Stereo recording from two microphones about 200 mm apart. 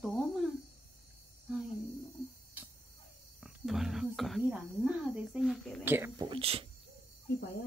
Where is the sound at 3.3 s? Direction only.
Centre (ahead or behind).